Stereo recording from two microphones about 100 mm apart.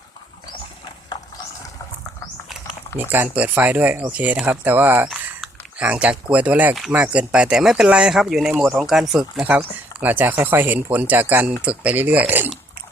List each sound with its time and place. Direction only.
3.0 s speech: 20° right (ahead or behind); by 9.5 s 5° right (ahead or behind)
9.5 s speech: 15° right (ahead or behind)